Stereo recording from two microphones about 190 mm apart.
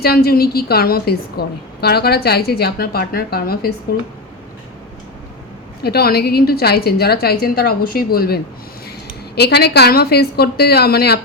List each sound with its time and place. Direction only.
0.0 s a woman's voice: 55° left (ahead or behind)
5.8 s a woman's voice: 55° left (ahead or behind)